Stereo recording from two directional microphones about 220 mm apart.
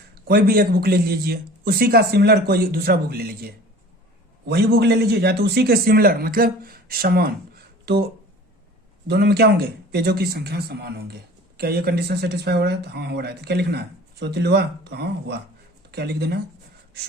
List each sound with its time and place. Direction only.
0.3 s speech: 45° right (ahead or behind)
9.0 s speech: 45° right (ahead or behind)